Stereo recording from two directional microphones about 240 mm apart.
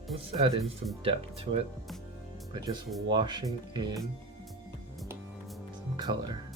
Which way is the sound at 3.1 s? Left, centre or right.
Centre.